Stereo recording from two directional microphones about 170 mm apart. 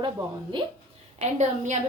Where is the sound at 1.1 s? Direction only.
45° right (ahead or behind).